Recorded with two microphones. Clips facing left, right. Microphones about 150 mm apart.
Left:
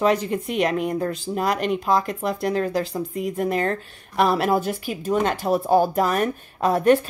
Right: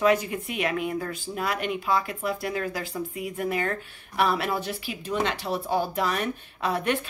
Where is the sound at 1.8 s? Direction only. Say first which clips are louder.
Left 5 dB; 40° left (ahead or behind).